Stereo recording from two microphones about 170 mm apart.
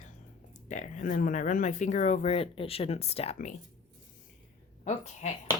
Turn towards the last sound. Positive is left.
turn(degrees=45)  # may be behind; listen again after turning